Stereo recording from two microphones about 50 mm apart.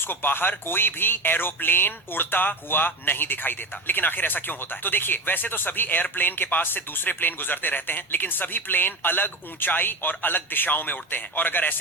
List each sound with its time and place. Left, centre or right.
0.1 s speech: left